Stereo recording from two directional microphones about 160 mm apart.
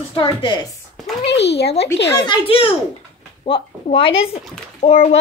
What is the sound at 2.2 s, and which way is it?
Speech, 30° left (ahead or behind).